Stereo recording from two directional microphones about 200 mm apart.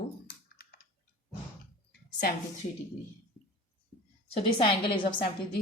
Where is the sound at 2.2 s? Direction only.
50° left (ahead or behind).